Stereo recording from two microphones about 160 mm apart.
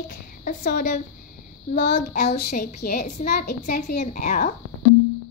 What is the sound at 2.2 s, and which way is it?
Speech, 85° left.